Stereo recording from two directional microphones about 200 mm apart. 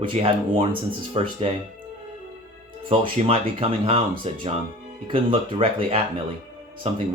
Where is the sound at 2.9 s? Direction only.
30° right (ahead or behind).